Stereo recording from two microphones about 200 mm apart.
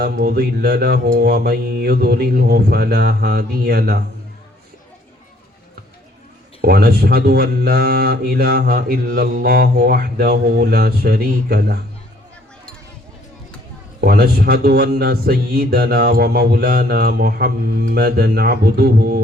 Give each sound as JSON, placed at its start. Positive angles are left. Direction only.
{"t": 0.0, "sound": "speech", "side_deg": -50}
{"t": 6.6, "sound": "speech", "side_deg": -50}
{"t": 14.0, "sound": "speech", "side_deg": -50}